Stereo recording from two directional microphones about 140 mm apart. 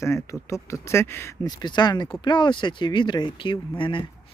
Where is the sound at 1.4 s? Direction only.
30° left (ahead or behind).